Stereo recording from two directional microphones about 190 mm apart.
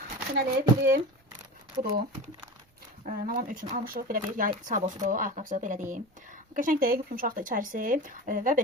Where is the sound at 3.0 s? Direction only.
45° right (ahead or behind).